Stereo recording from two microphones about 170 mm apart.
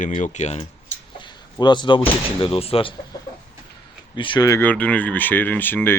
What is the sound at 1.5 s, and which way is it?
Speech, 25° left (ahead or behind).